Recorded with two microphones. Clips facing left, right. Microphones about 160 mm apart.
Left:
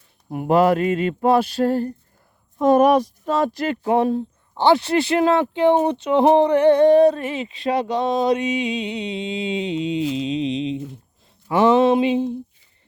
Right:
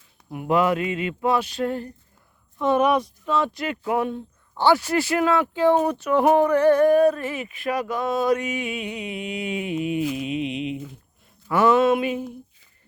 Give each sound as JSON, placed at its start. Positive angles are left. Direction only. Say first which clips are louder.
{"t": 0.3, "sound": "mantra", "louder": "left 4 dB", "side_deg": 40}
{"t": 4.5, "sound": "speech", "louder": "left 3 dB", "side_deg": 25}